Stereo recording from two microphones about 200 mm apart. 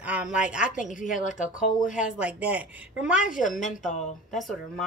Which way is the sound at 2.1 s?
5° right (ahead or behind).